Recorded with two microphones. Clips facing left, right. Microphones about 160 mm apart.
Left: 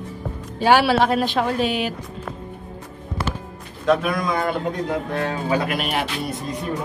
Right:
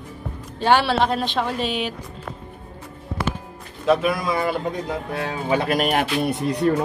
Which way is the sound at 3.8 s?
5° right (ahead or behind).